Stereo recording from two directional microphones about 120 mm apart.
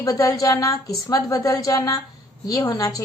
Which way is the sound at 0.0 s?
30° left (ahead or behind).